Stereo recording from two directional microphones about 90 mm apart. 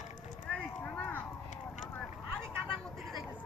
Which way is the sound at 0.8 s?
15° left (ahead or behind).